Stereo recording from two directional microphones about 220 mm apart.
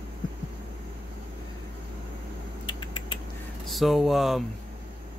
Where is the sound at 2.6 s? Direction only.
20° left (ahead or behind).